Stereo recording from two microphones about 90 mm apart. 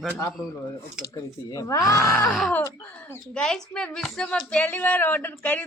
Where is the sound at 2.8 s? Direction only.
20° left (ahead or behind).